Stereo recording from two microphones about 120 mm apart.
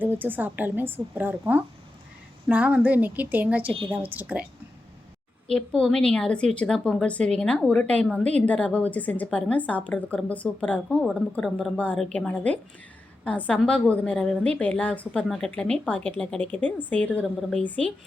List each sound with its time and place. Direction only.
0.0 s a woman's voice: 15° right (ahead or behind)
5.5 s a woman's voice: 5° left (ahead or behind)
12.1 s a woman's voice: 10° left (ahead or behind)